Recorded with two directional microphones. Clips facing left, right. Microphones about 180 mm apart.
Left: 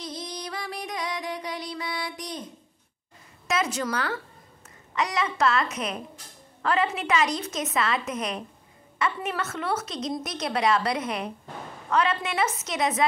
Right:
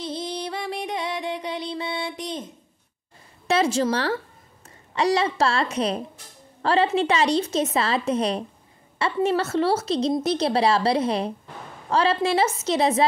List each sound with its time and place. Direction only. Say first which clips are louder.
0.0 s music: right 6 dB; 25° right (ahead or behind)
3.4 s a woman's voice: right 6 dB; 30° right (ahead or behind)